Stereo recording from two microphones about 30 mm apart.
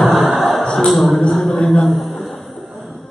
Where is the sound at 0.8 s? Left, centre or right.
Centre.